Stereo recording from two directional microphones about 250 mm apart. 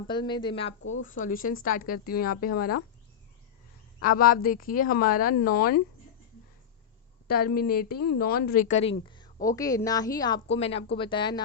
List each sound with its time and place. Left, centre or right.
0.1 s a woman's voice: centre
0.8 s speech: left
1.0 s speech: left
4.0 s speech: left
7.3 s a woman's voice: left; by 11.4 s centre